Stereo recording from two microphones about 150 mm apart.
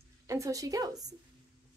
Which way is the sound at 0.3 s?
20° right (ahead or behind).